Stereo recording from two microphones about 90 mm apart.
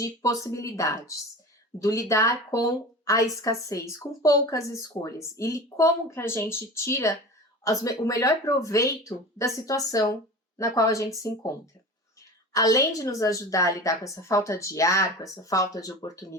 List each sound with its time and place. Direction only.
0.0 s a woman's voice: 35° left (ahead or behind)